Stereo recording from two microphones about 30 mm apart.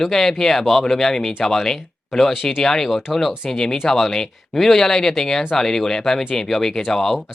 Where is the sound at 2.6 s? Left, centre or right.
Centre.